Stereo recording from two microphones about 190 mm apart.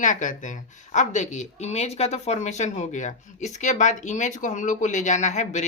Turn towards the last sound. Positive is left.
turn(degrees=40)  # may be behind; listen again after turning